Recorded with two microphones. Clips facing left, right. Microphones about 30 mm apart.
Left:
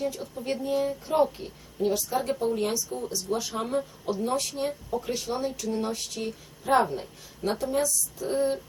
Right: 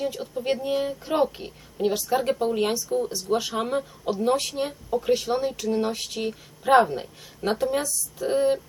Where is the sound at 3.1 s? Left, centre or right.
Right.